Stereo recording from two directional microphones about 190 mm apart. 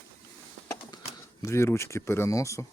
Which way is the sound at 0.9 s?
25° left (ahead or behind).